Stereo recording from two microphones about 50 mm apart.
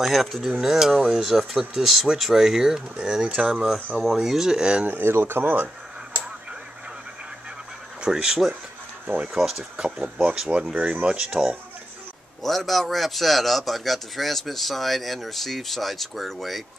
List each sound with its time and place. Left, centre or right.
0.0 s a man's voice: centre
4.8 s speech: right
8.0 s speech: centre
10.7 s speech: right
12.4 s a man's voice: centre